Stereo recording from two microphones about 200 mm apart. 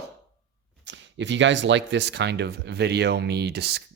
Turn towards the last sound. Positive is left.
turn(degrees=-55)  # may be behind; listen again after turning